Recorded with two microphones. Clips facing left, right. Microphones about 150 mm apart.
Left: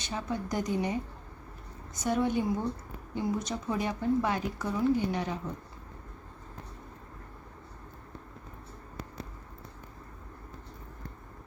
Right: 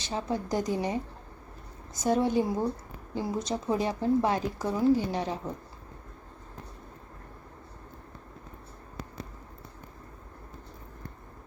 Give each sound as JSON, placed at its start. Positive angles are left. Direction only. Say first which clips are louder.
{"t": 0.0, "sound": "speech", "louder": "right 3 dB", "side_deg": -30}
{"t": 2.0, "sound": "speech", "louder": "right 3 dB", "side_deg": -35}